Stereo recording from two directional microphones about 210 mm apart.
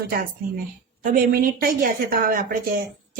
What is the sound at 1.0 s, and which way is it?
A woman's voice, 45° right (ahead or behind).